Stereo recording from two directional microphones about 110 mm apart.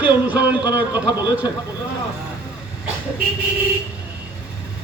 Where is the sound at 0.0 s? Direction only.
15° right (ahead or behind).